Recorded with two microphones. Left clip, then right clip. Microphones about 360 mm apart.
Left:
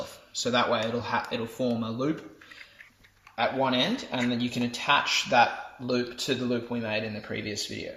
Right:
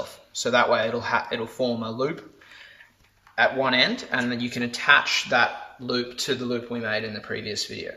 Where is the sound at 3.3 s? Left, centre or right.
Right.